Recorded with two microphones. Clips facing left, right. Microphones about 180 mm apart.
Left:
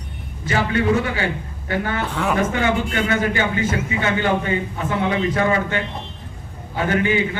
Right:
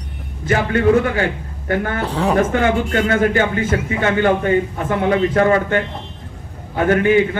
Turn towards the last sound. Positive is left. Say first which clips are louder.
# right 5 dB
turn(degrees=-50)  # may be behind; listen again after turning